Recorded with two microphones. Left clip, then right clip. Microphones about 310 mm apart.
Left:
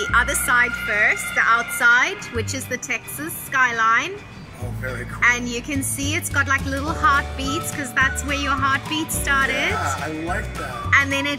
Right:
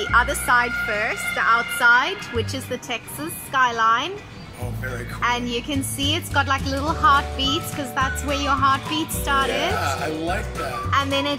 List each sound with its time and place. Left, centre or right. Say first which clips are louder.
0.0 s a woman's voice: even; centre